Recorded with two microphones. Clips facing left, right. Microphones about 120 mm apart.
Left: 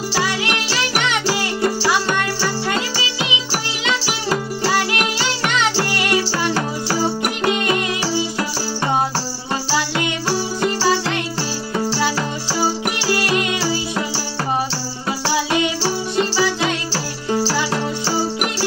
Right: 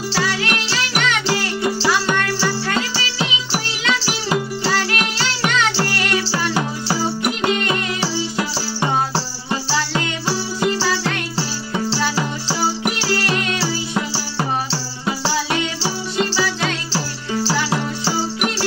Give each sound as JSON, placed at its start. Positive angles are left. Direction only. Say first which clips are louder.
{"t": 0.1, "sound": "music", "louder": "even", "side_deg": 15}
{"t": 2.7, "sound": "music", "louder": "even", "side_deg": 15}
{"t": 4.6, "sound": "music", "louder": "left 4 dB", "side_deg": 15}
{"t": 10.8, "sound": "music", "louder": "left 3 dB", "side_deg": 15}
{"t": 13.1, "sound": "music", "louder": "left 4 dB", "side_deg": 15}
{"t": 15.3, "sound": "music", "louder": "left 3 dB", "side_deg": 15}